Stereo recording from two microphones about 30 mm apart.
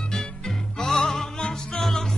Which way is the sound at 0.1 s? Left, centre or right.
Left.